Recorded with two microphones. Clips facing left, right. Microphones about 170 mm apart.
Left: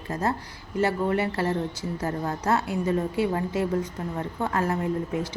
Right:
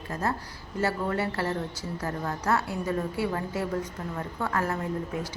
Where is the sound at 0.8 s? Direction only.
20° left (ahead or behind).